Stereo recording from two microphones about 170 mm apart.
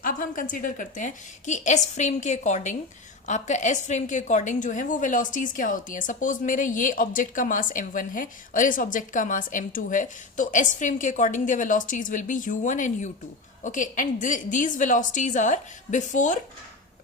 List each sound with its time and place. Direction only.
0.0 s a woman's voice: 55° left (ahead or behind)